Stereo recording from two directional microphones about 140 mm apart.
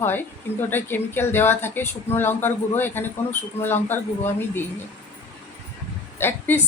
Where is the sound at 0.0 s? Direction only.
15° left (ahead or behind).